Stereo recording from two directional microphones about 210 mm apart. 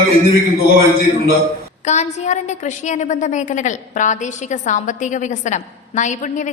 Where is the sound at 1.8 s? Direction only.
35° left (ahead or behind).